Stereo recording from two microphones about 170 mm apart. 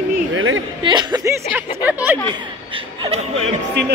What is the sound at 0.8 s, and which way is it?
Speech, 25° right (ahead or behind).